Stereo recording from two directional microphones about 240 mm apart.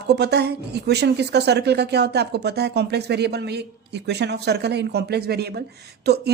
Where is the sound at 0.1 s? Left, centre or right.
Right.